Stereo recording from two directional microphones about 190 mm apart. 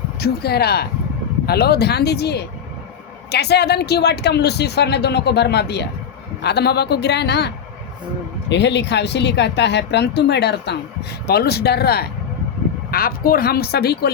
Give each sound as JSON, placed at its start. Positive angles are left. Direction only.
{"t": 0.2, "sound": "speech", "side_deg": 55}